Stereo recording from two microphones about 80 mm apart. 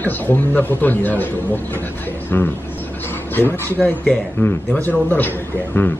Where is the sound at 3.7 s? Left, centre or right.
Centre.